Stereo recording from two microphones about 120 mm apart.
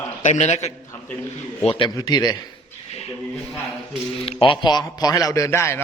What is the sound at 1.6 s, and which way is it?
Speech, 50° left (ahead or behind).